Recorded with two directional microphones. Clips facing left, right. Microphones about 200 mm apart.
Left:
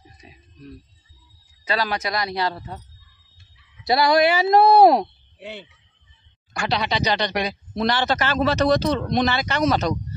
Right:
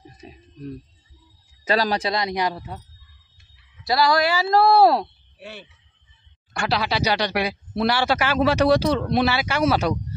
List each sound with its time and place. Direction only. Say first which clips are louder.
0.2 s a sound: right 6 dB; 40° right (ahead or behind)
1.6 s speech: right 3 dB; 40° right (ahead or behind); by 2.8 s 10° right (ahead or behind)
3.8 s speech: left 2 dB; 20° left (ahead or behind)
6.6 s speech: even; 5° right (ahead or behind)